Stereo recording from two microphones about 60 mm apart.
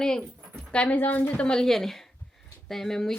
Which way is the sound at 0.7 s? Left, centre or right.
Left.